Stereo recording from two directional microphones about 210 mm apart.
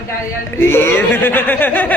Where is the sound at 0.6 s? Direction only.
10° left (ahead or behind).